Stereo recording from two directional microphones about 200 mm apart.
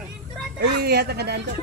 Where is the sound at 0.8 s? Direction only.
55° right (ahead or behind).